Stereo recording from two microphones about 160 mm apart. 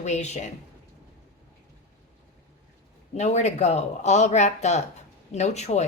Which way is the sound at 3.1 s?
45° left (ahead or behind).